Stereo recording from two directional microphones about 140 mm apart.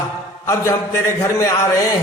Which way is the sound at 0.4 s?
20° left (ahead or behind).